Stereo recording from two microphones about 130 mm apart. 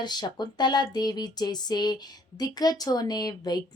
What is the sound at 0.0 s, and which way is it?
Speech, 35° left (ahead or behind).